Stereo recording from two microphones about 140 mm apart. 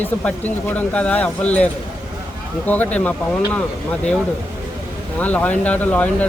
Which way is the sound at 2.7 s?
10° left (ahead or behind).